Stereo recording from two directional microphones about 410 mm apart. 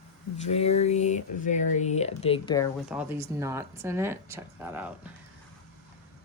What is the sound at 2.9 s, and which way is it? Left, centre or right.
Speech, centre.